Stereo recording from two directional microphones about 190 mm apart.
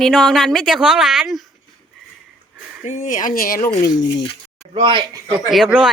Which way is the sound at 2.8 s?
40° left (ahead or behind).